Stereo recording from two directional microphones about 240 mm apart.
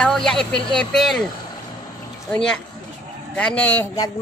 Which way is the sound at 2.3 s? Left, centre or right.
Centre.